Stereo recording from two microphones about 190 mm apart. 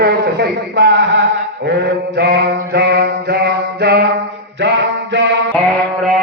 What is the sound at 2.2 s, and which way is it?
Mantra, 60° right (ahead or behind).